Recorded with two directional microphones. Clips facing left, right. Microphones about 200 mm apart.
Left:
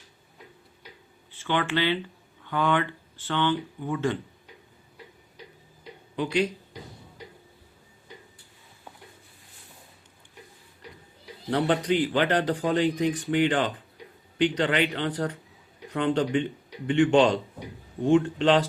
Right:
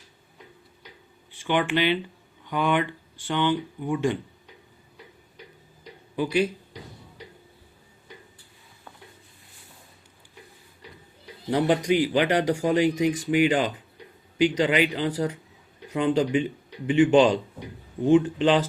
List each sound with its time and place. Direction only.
1.3 s speech: 15° right (ahead or behind)
6.1 s speech: 5° right (ahead or behind)
11.5 s speech: 10° right (ahead or behind)